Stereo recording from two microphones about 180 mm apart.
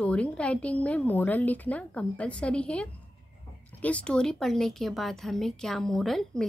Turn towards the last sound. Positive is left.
turn(degrees=0)  # may be behind; listen again after turning